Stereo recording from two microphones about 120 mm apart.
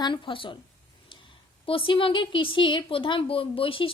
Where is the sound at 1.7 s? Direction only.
45° left (ahead or behind).